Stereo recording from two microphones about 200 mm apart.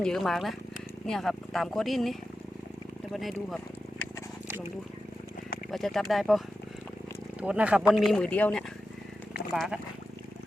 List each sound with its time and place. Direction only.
0.0 s speech: centre (ahead or behind)
5.7 s speech: centre (ahead or behind)
7.4 s speech: 5° right (ahead or behind)
9.6 s speech: 5° right (ahead or behind)